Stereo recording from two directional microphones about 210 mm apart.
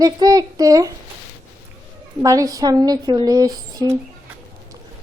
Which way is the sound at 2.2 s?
15° right (ahead or behind).